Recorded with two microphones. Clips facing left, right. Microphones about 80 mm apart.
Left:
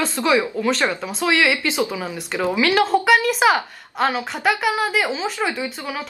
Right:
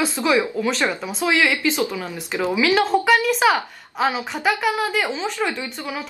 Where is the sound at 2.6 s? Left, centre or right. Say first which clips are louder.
Left 1 dB; centre.